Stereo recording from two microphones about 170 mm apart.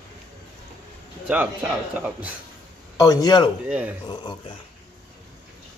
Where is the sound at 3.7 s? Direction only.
10° right (ahead or behind).